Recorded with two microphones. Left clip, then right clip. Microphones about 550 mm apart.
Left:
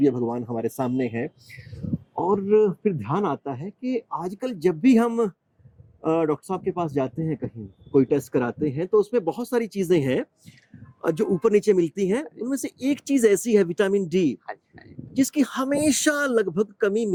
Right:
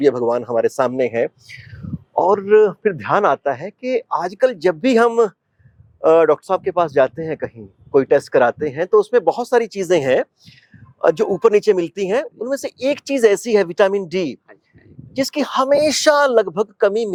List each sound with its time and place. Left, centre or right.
0.0 s speech: right